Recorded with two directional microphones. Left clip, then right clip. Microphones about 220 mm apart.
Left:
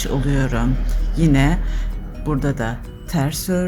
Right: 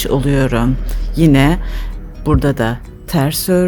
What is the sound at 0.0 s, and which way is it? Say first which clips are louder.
Speech: right 7 dB; 50° right (ahead or behind).